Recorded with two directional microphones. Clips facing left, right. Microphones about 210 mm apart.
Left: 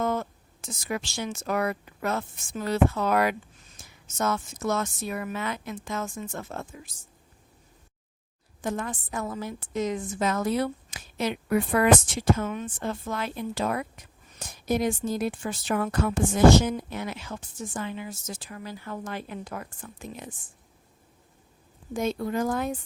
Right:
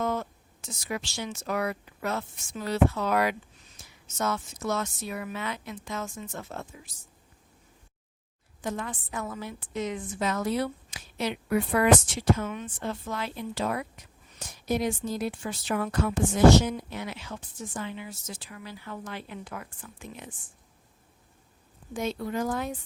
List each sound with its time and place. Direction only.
0.0 s a woman's voice: 50° left (ahead or behind)
8.6 s a woman's voice: 45° left (ahead or behind)
21.9 s a woman's voice: 50° left (ahead or behind)